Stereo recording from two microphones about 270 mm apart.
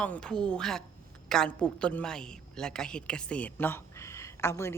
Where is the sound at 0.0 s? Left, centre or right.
Centre.